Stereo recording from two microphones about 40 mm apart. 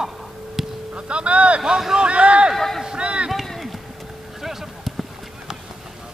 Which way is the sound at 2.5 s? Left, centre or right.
Centre.